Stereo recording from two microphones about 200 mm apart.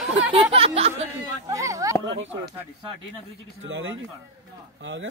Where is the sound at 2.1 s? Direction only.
70° right (ahead or behind).